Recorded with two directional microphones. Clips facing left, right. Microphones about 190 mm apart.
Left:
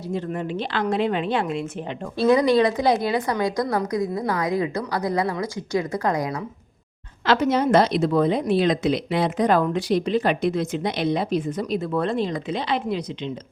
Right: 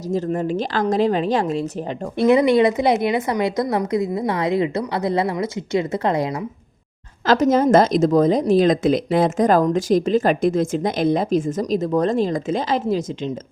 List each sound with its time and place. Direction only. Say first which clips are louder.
0.3 s speech: right 5 dB; 45° right (ahead or behind)
2.1 s a woman's voice: right 3 dB; 20° right (ahead or behind)
7.3 s a woman's voice: right 4 dB; 45° right (ahead or behind)